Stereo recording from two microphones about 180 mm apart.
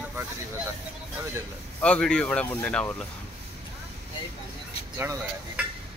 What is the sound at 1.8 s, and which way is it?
Speech, 5° left (ahead or behind).